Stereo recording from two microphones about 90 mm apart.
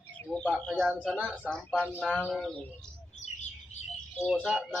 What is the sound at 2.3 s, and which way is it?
Speech, centre (ahead or behind).